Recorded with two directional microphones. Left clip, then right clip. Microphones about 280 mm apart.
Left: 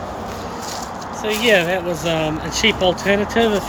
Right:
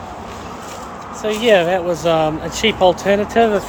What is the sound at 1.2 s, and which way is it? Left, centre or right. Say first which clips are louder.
Speech: right 2 dB; centre.